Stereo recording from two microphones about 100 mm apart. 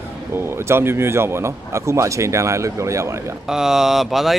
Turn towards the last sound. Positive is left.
turn(degrees=0)  # may be behind; listen again after turning